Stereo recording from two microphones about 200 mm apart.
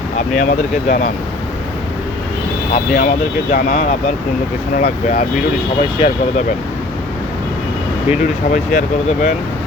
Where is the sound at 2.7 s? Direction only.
40° left (ahead or behind).